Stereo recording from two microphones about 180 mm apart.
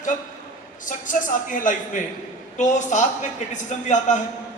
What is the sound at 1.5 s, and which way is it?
A man's voice, 45° left (ahead or behind).